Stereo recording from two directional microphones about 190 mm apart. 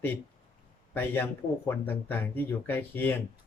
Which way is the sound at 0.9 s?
10° left (ahead or behind).